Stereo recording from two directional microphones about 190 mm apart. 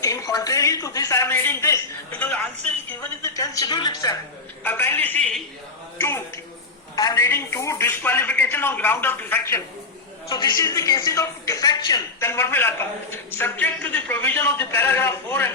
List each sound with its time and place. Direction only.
0.0 s a man's voice: 20° left (ahead or behind)